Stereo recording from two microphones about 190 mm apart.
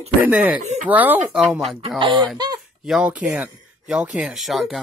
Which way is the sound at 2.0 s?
25° right (ahead or behind).